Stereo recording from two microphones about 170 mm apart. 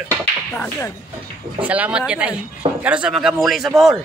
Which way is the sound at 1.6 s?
10° right (ahead or behind).